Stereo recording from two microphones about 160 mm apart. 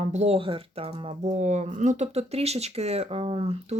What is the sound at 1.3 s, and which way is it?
Speech, 50° right (ahead or behind).